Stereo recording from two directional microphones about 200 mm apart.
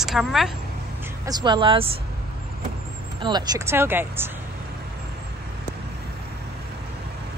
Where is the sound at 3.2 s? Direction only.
20° right (ahead or behind).